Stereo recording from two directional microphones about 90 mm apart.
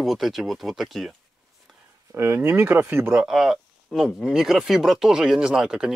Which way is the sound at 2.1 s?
30° right (ahead or behind).